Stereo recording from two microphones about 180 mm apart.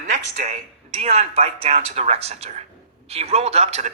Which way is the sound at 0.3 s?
45° right (ahead or behind).